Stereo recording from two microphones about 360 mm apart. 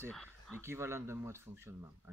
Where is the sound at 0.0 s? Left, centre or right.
Centre.